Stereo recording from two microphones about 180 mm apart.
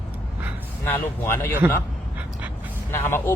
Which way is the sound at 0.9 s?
10° left (ahead or behind).